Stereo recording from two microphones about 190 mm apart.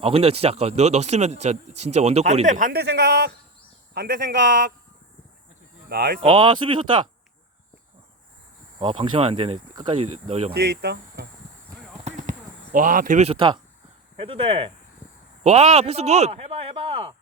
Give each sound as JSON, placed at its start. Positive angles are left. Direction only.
{"t": 0.0, "sound": "speech", "side_deg": -30}
{"t": 5.9, "sound": "speech", "side_deg": -50}
{"t": 6.3, "sound": "speech", "side_deg": -25}
{"t": 8.8, "sound": "speech", "side_deg": -30}
{"t": 10.5, "sound": "speech", "side_deg": -60}
{"t": 12.0, "sound": "a sound", "side_deg": -40}
{"t": 12.7, "sound": "speech", "side_deg": -45}